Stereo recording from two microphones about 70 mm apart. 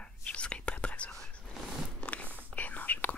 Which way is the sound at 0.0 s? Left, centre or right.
Centre.